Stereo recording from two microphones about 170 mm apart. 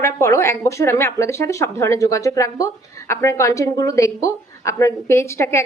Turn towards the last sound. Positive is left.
turn(degrees=15)  # may be behind; listen again after turning